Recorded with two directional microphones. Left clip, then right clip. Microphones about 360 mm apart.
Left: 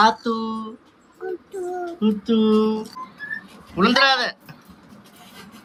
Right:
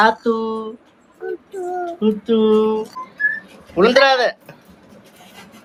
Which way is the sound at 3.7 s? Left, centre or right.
Centre.